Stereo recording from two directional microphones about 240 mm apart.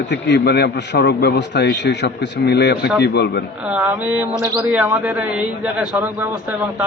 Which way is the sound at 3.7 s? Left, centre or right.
Centre.